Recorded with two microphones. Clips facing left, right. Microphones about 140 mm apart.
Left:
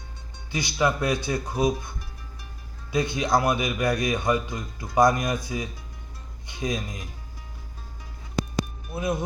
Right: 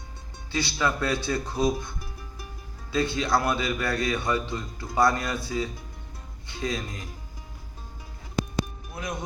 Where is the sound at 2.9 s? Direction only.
15° left (ahead or behind).